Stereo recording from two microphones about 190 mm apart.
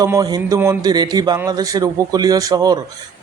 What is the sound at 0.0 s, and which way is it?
Speech, 20° right (ahead or behind).